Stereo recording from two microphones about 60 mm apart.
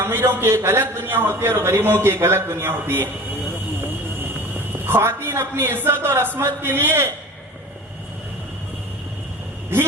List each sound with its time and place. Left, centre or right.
0.0 s a man's voice: right
4.2 s a man's voice: right